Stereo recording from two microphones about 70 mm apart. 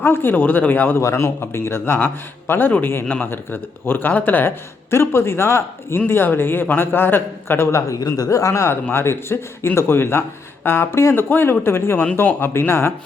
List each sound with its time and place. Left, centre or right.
0.0 s speech: left
1.0 s speech: left
7.9 s speech: left
8.6 s speech: left